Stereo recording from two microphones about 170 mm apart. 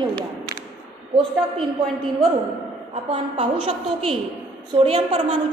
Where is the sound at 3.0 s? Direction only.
35° right (ahead or behind).